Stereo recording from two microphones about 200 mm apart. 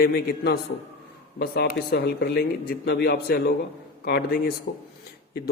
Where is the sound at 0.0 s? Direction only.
55° left (ahead or behind).